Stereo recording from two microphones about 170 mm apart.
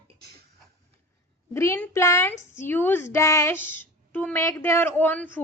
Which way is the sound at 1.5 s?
15° left (ahead or behind).